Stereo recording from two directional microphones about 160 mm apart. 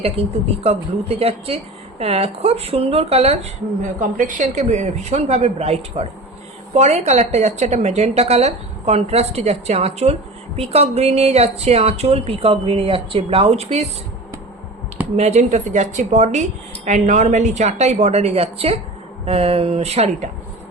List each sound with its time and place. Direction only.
0.0 s speech: 40° right (ahead or behind)
4.0 s a woman's voice: 55° right (ahead or behind)
15.1 s a woman's voice: 45° right (ahead or behind)